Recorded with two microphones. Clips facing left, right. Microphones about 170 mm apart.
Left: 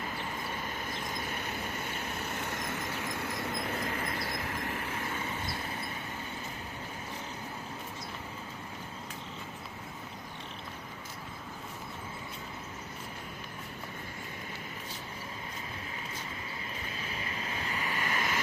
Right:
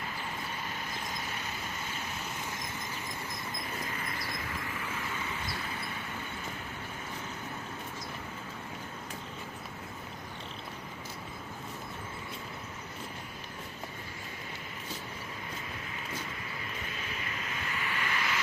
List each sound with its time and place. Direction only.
1.1 s vehicle: 50° left (ahead or behind)
17.1 s waves: 35° left (ahead or behind)